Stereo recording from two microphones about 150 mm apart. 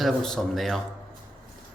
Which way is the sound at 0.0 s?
Centre (ahead or behind).